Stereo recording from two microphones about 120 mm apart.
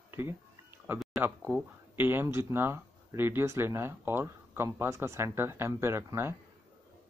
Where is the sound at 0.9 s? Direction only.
20° right (ahead or behind).